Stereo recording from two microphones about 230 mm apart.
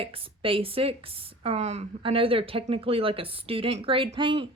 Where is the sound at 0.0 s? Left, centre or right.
Right.